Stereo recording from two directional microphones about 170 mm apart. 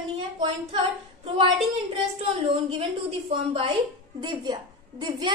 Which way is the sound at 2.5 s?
35° right (ahead or behind).